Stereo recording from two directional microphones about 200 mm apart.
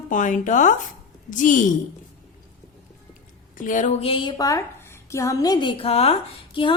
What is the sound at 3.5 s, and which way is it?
A woman's voice, 40° left (ahead or behind).